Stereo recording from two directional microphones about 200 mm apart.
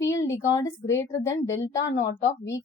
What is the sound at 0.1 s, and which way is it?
A woman's voice, 15° left (ahead or behind).